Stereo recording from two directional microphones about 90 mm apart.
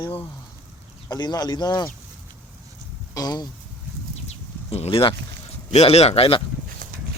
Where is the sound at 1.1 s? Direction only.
50° left (ahead or behind).